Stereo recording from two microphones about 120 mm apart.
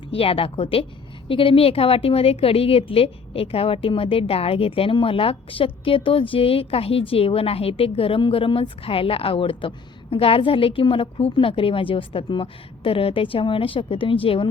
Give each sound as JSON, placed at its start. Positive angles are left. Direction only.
{"t": 0.1, "sound": "a woman's voice", "side_deg": 50}